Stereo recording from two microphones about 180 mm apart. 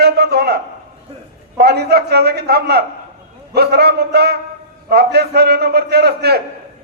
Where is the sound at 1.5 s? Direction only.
60° right (ahead or behind).